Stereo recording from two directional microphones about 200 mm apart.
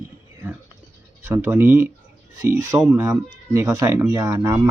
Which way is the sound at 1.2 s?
10° right (ahead or behind).